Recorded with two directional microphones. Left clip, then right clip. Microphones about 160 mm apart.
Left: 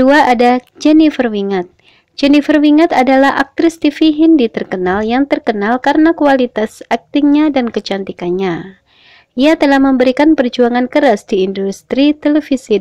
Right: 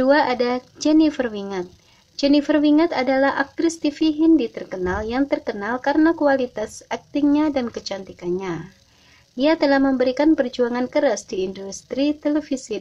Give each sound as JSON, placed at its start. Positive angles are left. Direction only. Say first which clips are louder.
{"t": 0.0, "sound": "speech", "louder": "left 9 dB", "side_deg": 40}